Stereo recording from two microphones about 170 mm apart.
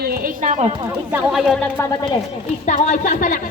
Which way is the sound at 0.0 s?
60° right (ahead or behind).